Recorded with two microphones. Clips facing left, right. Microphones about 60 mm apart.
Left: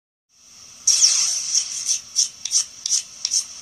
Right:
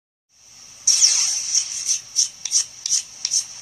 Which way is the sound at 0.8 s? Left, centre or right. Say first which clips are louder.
Even; left.